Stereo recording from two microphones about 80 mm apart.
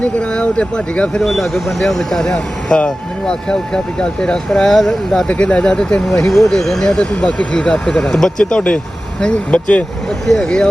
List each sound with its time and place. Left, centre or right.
0.0 s speech: centre
1.2 s speech: centre